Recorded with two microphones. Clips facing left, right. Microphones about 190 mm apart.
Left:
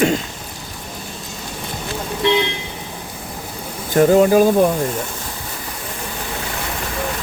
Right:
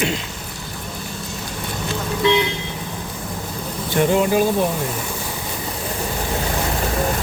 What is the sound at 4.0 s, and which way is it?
Speech, 40° left (ahead or behind).